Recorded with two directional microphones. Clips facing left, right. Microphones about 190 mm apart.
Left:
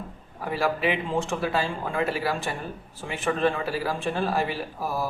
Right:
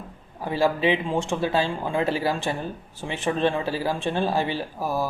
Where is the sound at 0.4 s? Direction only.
25° right (ahead or behind).